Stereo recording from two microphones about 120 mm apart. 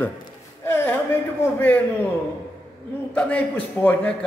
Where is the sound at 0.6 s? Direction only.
20° left (ahead or behind).